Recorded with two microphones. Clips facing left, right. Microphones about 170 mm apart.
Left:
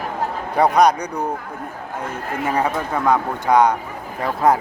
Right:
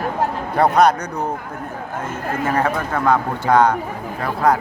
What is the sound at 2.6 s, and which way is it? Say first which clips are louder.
Speech: right 1 dB; 15° left (ahead or behind).